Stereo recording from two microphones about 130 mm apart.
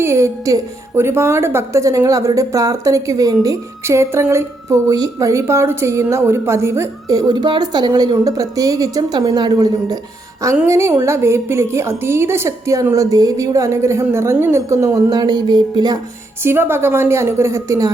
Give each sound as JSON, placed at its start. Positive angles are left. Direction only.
{"t": 0.0, "sound": "a woman's voice", "side_deg": -20}
{"t": 16.4, "sound": "a woman's voice", "side_deg": -15}